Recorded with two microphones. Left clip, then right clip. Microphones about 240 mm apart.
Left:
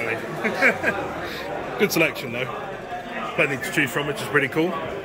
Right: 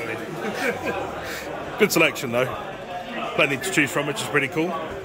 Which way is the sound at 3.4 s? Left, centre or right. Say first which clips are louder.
Right 1 dB; centre.